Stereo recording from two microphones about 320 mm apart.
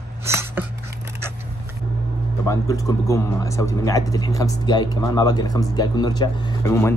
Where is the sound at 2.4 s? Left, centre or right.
Centre.